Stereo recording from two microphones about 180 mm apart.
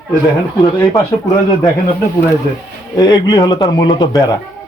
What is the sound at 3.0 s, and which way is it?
Speech, 20° left (ahead or behind).